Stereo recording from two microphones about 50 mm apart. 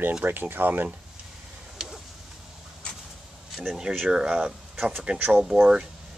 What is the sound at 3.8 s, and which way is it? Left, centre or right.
Speech, centre.